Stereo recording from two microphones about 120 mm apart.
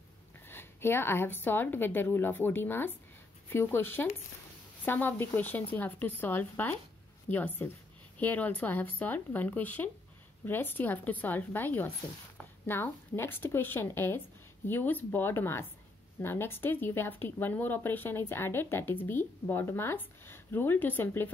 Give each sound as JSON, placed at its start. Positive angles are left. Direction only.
{"t": 0.5, "sound": "a woman's voice", "side_deg": 20}